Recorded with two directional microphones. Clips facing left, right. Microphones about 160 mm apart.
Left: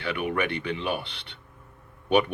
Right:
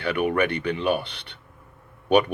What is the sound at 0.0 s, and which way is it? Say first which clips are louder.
Speech: right 5 dB; 45° right (ahead or behind).